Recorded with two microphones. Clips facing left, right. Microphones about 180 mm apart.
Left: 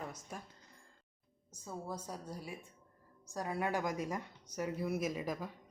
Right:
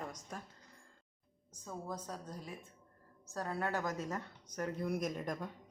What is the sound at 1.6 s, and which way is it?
A woman's voice, 10° left (ahead or behind).